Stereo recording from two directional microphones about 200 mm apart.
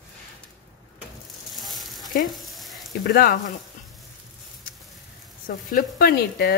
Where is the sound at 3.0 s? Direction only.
45° left (ahead or behind).